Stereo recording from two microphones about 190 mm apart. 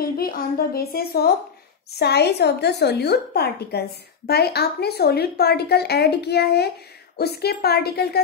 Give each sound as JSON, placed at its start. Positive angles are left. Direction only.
{"t": 0.0, "sound": "a woman's voice", "side_deg": 50}